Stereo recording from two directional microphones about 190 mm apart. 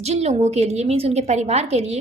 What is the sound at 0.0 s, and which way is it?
A woman's voice, 35° right (ahead or behind).